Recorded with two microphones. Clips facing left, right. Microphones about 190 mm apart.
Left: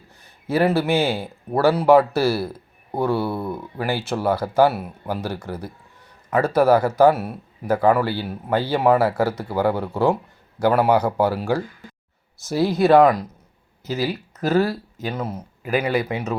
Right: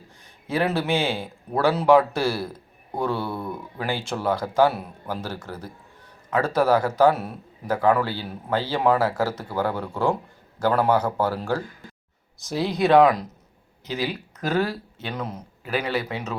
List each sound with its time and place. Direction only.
0.4 s speech: 5° left (ahead or behind)